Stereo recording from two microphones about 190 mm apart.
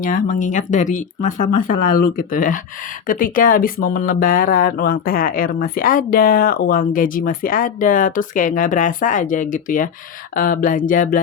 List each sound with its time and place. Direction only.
0.0 s speech: 45° left (ahead or behind)